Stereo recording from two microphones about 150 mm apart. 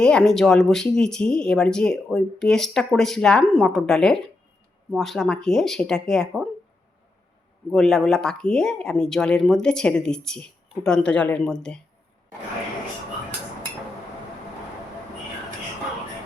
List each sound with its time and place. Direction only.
0.0 s speech: 5° left (ahead or behind)
7.7 s speech: centre (ahead or behind)